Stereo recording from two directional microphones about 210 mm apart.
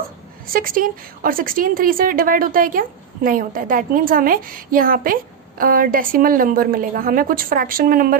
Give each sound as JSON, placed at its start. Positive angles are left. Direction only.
{"t": 0.4, "sound": "a woman's voice", "side_deg": -45}